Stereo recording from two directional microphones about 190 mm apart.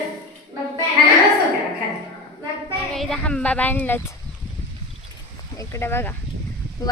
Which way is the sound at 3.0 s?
Centre (ahead or behind).